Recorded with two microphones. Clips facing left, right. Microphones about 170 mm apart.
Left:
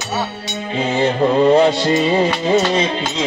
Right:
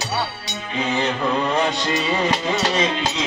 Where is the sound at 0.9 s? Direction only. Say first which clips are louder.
Left 7 dB; 40° left (ahead or behind).